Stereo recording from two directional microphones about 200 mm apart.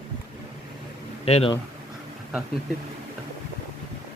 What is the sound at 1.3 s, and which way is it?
Speech, 30° left (ahead or behind).